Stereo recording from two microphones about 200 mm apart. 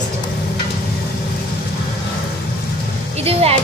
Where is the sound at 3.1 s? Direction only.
30° right (ahead or behind).